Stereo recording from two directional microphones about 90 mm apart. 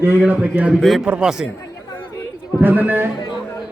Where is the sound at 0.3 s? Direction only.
15° right (ahead or behind).